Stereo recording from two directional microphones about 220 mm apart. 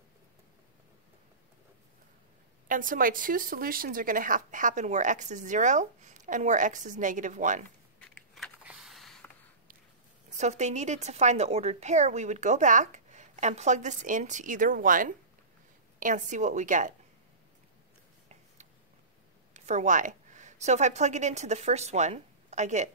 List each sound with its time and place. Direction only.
2.7 s speech: 40° right (ahead or behind)
8.0 s a sound: centre (ahead or behind)
10.3 s speech: 30° right (ahead or behind)
19.5 s a woman's voice: 30° right (ahead or behind)